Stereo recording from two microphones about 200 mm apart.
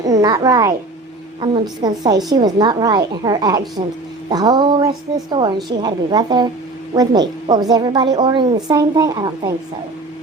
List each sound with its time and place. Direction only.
0.0 s a child's voice: 20° right (ahead or behind)